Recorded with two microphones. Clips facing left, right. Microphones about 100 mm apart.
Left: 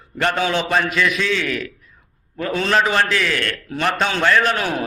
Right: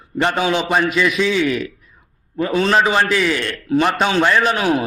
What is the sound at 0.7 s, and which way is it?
A man's voice, 5° right (ahead or behind).